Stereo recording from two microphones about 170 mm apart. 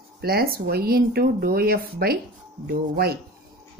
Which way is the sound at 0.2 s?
60° right (ahead or behind).